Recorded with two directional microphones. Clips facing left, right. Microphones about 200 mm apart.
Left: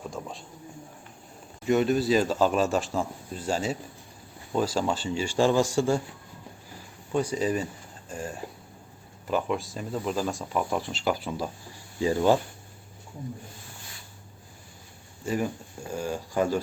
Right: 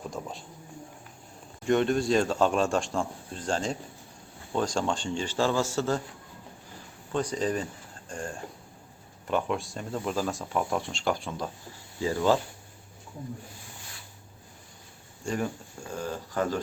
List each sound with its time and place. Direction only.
0.1 s a sound: centre (ahead or behind)
1.6 s speech: 5° left (ahead or behind)
7.1 s speech: 10° left (ahead or behind)
11.9 s speech: 15° left (ahead or behind)
15.2 s speech: 5° left (ahead or behind)